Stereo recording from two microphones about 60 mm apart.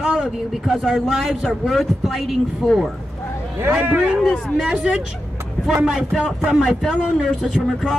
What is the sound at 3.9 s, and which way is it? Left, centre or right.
Speech, right.